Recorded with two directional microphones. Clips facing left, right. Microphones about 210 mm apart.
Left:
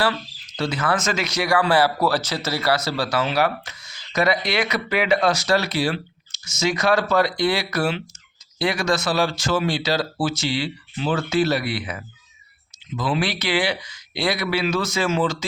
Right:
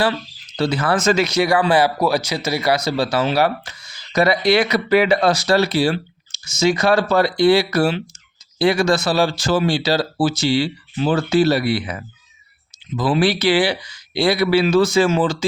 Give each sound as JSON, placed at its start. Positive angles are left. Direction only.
{"t": 0.5, "sound": "speech", "side_deg": -30}